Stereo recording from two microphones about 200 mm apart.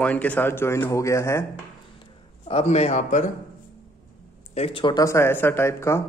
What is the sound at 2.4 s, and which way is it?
Speech, 30° left (ahead or behind).